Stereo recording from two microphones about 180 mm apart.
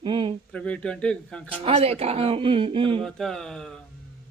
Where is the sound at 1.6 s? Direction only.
35° right (ahead or behind).